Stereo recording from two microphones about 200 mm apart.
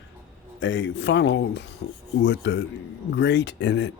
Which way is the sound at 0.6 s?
65° left (ahead or behind).